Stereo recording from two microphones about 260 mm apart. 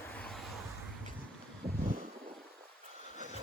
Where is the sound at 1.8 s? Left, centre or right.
Right.